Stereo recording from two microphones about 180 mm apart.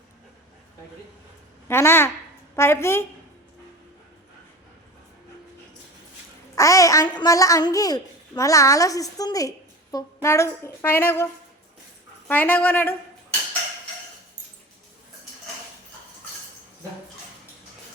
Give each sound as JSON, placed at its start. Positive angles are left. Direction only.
{"t": 1.6, "sound": "a woman's voice", "side_deg": 15}
{"t": 6.6, "sound": "a woman's voice", "side_deg": 20}
{"t": 12.3, "sound": "a woman's voice", "side_deg": 10}